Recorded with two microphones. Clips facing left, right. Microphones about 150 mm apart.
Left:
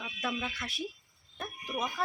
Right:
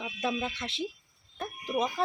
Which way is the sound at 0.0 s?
25° right (ahead or behind).